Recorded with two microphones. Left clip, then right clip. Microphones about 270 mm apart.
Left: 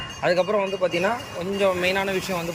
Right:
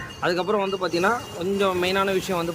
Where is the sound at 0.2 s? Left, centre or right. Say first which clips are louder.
Left 2 dB; centre.